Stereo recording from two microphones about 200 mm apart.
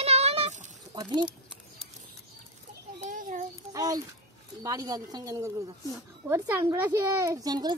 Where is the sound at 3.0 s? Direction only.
40° right (ahead or behind).